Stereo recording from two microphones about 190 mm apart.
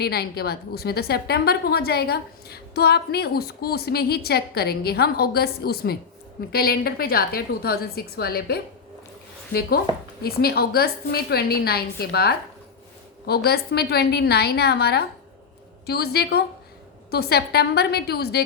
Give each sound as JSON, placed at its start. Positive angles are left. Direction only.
{"t": 0.0, "sound": "a woman's voice", "side_deg": 55}